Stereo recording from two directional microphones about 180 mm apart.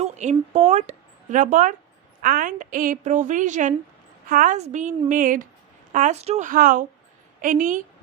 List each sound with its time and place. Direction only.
0.0 s a woman's voice: 40° right (ahead or behind)